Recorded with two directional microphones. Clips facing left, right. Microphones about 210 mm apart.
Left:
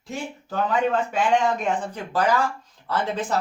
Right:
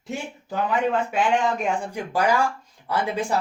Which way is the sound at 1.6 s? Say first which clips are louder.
Even; 10° right (ahead or behind).